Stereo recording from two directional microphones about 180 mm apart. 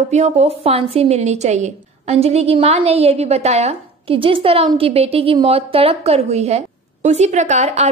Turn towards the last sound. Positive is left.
turn(degrees=-40)  # may be behind; listen again after turning